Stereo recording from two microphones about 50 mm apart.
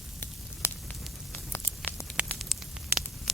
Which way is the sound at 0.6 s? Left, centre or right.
Left.